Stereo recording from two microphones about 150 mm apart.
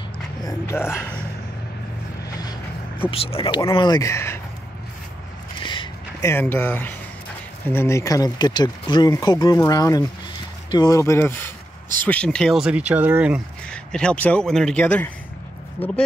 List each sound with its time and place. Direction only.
0.4 s speech: 20° left (ahead or behind)
3.1 s speech: 40° left (ahead or behind); by 4.4 s 20° left (ahead or behind)
5.6 s a sound: 35° left (ahead or behind)
6.2 s speech: 15° left (ahead or behind); by 13.4 s 10° right (ahead or behind)
13.7 s speech: 5° left (ahead or behind)